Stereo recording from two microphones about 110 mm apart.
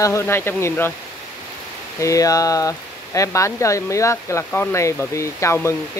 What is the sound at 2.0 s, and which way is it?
Speech, 30° left (ahead or behind).